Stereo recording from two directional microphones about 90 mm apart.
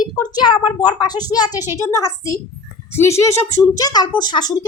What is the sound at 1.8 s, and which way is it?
A woman's voice, 35° left (ahead or behind).